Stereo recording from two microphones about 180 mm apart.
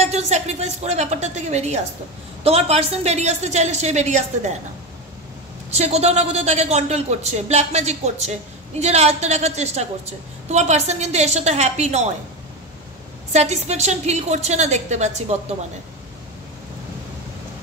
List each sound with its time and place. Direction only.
0.0 s a woman's voice: 40° right (ahead or behind)
5.7 s a woman's voice: 35° right (ahead or behind)
13.3 s a woman's voice: 40° right (ahead or behind)